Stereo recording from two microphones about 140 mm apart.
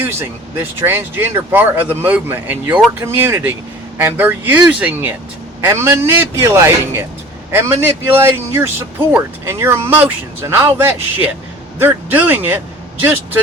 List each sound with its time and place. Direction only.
0.0 s a man's voice: 15° right (ahead or behind)